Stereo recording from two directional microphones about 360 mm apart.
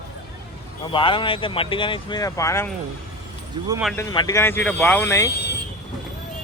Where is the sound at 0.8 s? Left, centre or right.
Centre.